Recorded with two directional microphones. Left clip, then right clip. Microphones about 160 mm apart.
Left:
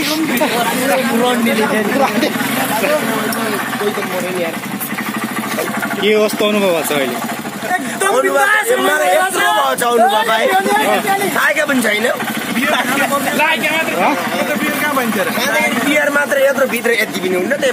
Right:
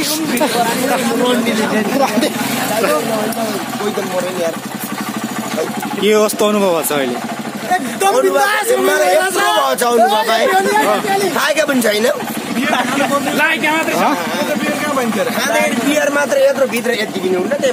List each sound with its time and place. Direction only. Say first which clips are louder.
2.0 s speech: right 1 dB; 30° right (ahead or behind)
6.0 s speech: right 1 dB; 30° right (ahead or behind)
8.4 s speech: left 1 dB; 20° right (ahead or behind)
8.9 s speech: even; centre (ahead or behind)
11.5 s speech: right 1 dB; 90° right
15.4 s a man's voice: even; 75° right (ahead or behind)